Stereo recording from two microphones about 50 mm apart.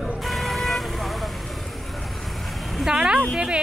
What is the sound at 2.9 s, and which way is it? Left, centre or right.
Speech, centre.